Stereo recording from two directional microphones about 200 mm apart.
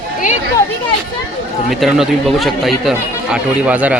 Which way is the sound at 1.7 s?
Centre (ahead or behind).